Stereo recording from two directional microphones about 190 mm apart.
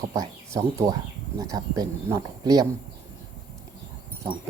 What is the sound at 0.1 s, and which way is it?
Speech, 15° right (ahead or behind).